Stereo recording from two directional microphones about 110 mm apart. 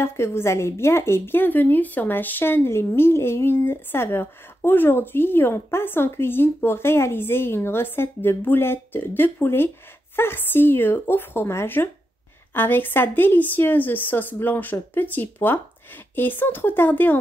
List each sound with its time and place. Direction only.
0.0 s a woman's voice: 25° left (ahead or behind)